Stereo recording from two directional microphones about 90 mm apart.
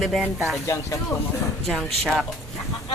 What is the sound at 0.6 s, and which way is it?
Speech, 35° left (ahead or behind).